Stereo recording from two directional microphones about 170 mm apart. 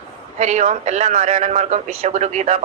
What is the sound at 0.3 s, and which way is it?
A man's voice, 40° right (ahead or behind).